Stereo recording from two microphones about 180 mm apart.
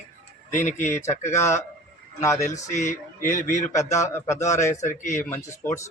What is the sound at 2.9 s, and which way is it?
A man's voice, 45° left (ahead or behind).